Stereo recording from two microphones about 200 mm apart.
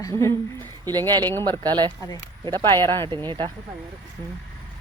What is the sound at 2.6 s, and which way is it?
Speech, 15° left (ahead or behind).